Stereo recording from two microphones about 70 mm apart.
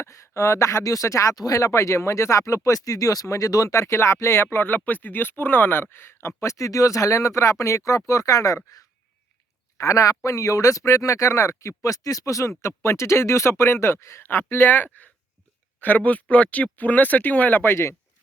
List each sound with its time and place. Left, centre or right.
0.0 s speech: left